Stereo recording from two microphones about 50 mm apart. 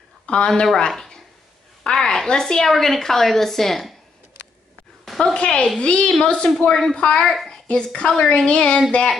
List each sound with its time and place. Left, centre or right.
0.3 s a woman's voice: centre
5.2 s a woman's voice: left